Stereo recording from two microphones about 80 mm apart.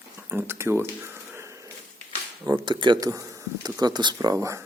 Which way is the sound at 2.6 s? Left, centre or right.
Right.